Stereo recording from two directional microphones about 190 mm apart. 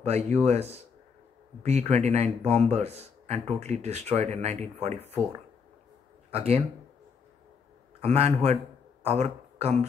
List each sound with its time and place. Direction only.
0.0 s a man's voice: 35° right (ahead or behind)
6.3 s a man's voice: 30° right (ahead or behind)
8.0 s a man's voice: 35° right (ahead or behind)